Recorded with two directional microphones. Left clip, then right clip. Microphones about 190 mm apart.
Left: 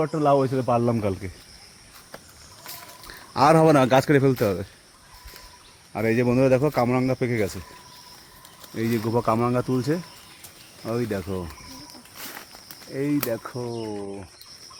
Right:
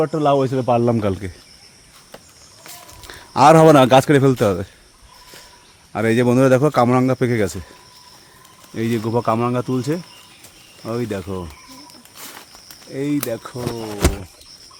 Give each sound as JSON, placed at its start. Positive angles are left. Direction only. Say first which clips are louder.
{"t": 0.0, "sound": "a man's voice", "louder": "right 4 dB", "side_deg": -40}
{"t": 3.1, "sound": "a man's voice", "louder": "right 7 dB", "side_deg": -30}
{"t": 5.9, "sound": "a man's voice", "louder": "right 6 dB", "side_deg": -30}
{"t": 8.7, "sound": "speech", "louder": "right 4 dB", "side_deg": -20}
{"t": 12.9, "sound": "speech", "louder": "right 3 dB", "side_deg": -20}
{"t": 13.3, "sound": "speech", "louder": "right 2 dB", "side_deg": -5}